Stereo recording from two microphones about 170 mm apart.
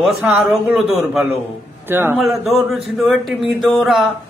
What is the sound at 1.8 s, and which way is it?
Speech, 10° right (ahead or behind).